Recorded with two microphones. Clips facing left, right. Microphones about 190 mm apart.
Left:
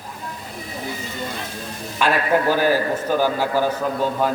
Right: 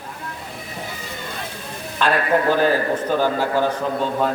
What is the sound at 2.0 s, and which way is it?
A man's voice, 10° left (ahead or behind).